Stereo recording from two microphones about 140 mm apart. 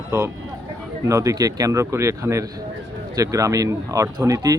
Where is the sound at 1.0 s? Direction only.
25° right (ahead or behind).